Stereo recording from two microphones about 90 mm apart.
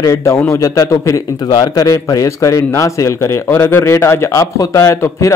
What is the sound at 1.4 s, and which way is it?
Speech, 45° left (ahead or behind).